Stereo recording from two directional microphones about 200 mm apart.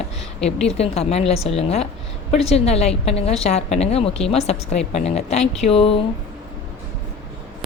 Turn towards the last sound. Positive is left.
turn(degrees=30)  # may be behind; listen again after turning